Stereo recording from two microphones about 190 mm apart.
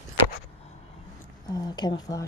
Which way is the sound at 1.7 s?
20° left (ahead or behind).